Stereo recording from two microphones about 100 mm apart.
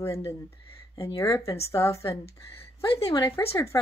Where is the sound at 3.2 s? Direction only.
25° left (ahead or behind).